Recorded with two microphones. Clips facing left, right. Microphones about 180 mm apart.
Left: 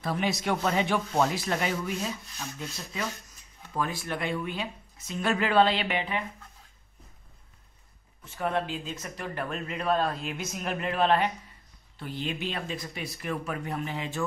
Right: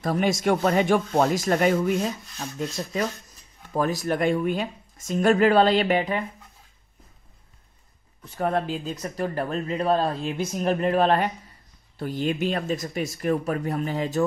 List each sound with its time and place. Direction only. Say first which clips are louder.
0.0 s speech: right 6 dB; 45° right (ahead or behind)
8.4 s speech: right 4 dB; 40° right (ahead or behind)